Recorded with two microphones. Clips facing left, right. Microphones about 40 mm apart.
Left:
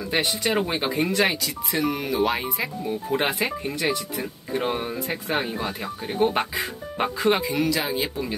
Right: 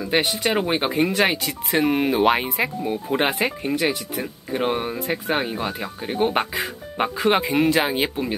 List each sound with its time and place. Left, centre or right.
0.2 s speech: right
3.7 s speech: right
4.2 s speech: right
5.1 s speech: centre
7.2 s speech: right